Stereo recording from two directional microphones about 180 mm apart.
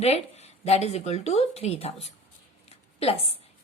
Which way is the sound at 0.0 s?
35° left (ahead or behind).